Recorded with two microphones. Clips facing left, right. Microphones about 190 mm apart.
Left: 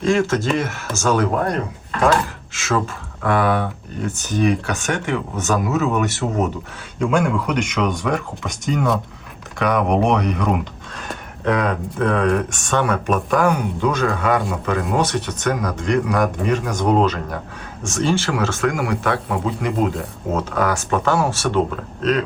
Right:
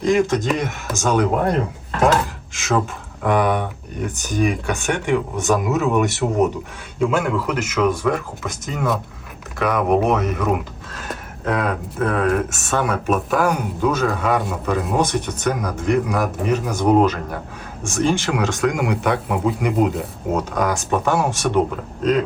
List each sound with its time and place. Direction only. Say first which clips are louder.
0.0 s speech: right 1 dB; 15° right (ahead or behind)
2.5 s speech: right 1 dB; 15° right (ahead or behind)
5.5 s speech: left 1 dB; centre (ahead or behind); by 19.2 s 15° right (ahead or behind)
19.3 s speech: right 2 dB; 5° right (ahead or behind)
20.3 s speech: even; 15° right (ahead or behind)